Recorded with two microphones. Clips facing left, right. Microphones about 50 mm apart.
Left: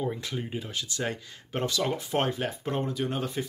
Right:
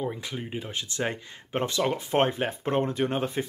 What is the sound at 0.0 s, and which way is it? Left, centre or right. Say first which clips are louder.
Speech: even; centre.